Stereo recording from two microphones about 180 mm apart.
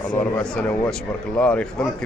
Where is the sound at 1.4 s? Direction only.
5° left (ahead or behind).